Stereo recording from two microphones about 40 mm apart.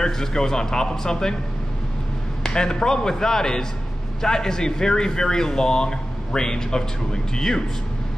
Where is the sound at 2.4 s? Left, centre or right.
Centre.